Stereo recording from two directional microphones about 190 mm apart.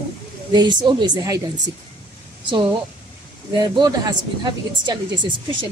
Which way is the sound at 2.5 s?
25° right (ahead or behind).